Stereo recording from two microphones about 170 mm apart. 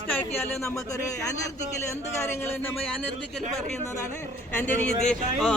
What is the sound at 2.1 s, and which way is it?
Speech, 15° left (ahead or behind).